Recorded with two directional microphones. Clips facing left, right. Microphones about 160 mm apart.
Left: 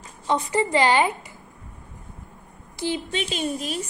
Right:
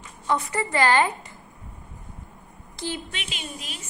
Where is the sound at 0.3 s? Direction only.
20° left (ahead or behind).